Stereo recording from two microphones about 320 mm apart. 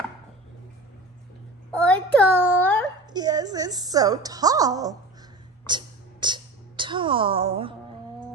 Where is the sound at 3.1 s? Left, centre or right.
Centre.